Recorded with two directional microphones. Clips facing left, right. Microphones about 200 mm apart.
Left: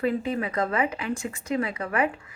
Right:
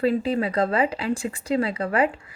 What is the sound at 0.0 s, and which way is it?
Speech, 30° right (ahead or behind).